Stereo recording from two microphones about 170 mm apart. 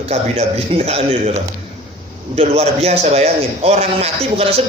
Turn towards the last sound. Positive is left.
turn(degrees=-35)  # may be behind; listen again after turning